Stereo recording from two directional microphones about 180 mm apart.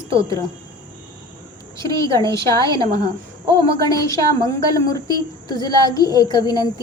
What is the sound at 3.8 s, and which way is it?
A woman's voice, 20° left (ahead or behind).